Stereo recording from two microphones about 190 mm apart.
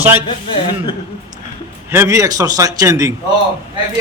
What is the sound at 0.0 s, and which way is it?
Speech, 10° right (ahead or behind).